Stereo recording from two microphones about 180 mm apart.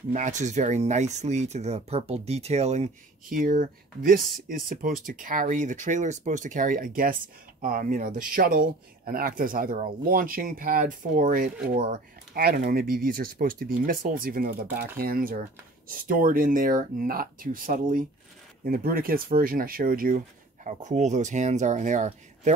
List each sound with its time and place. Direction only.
0.1 s speech: 40° right (ahead or behind)
3.3 s speech: 50° right (ahead or behind)